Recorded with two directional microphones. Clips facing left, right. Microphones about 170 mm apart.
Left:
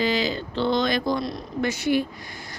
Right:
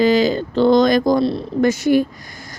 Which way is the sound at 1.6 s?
45° right (ahead or behind).